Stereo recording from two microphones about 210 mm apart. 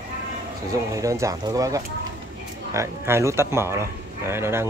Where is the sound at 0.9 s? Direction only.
15° right (ahead or behind).